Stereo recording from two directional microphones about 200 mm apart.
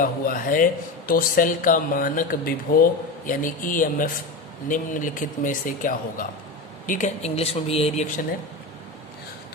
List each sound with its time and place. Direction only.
0.0 s a man's voice: 45° left (ahead or behind)